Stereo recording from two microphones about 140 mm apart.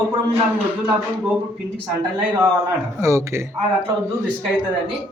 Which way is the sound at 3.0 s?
20° right (ahead or behind).